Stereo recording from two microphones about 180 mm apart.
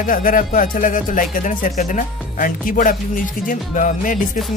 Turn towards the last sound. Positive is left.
turn(degrees=45)  # may be behind; listen again after turning